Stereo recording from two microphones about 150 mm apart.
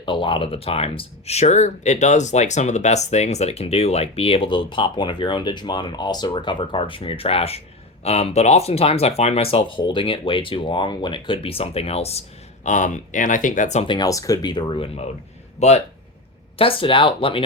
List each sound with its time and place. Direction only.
0.0 s speech: 35° left (ahead or behind)
12.6 s speech: 55° left (ahead or behind)
13.8 s speech: 30° left (ahead or behind); by 15.8 s 50° left (ahead or behind)
16.6 s speech: 35° left (ahead or behind)